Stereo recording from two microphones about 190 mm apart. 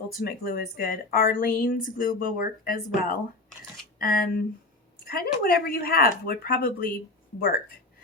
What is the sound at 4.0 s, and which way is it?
Speech, 50° left (ahead or behind).